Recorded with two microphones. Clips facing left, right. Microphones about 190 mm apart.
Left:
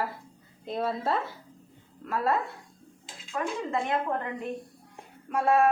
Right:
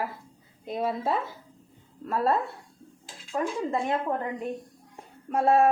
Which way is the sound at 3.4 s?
25° right (ahead or behind).